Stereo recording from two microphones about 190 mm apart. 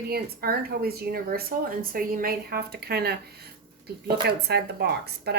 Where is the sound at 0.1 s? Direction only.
55° right (ahead or behind).